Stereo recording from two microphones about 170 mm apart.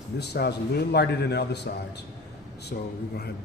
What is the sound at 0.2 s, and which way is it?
Speech, 75° left (ahead or behind).